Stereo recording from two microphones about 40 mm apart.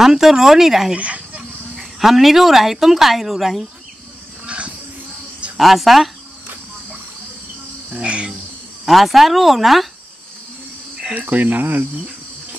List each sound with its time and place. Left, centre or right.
0.0 s speech: centre
0.9 s speech: right
1.8 s speech: centre
4.5 s music: right
5.6 s speech: centre
8.0 s cricket: right
8.8 s speech: centre
11.1 s speech: right